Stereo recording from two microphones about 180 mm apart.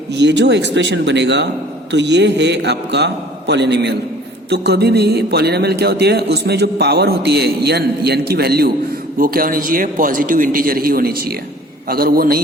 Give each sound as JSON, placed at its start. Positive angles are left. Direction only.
{"t": 0.1, "sound": "a man's voice", "side_deg": -75}